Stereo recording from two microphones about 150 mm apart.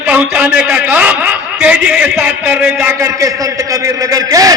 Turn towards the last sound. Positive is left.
turn(degrees=-25)  # may be behind; listen again after turning